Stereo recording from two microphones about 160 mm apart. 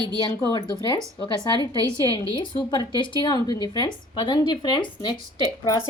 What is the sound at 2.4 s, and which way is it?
Speech, 30° left (ahead or behind).